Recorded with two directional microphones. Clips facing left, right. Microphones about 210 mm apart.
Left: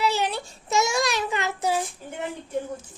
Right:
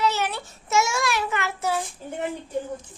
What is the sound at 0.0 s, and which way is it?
Child singing, 15° left (ahead or behind).